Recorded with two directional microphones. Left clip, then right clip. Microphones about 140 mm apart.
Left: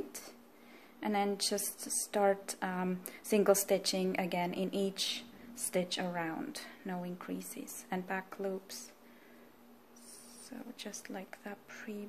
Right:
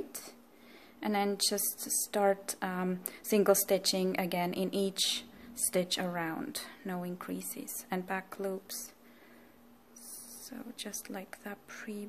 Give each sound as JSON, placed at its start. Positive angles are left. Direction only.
{"t": 1.0, "sound": "a woman's voice", "side_deg": -20}
{"t": 10.5, "sound": "a woman's voice", "side_deg": -20}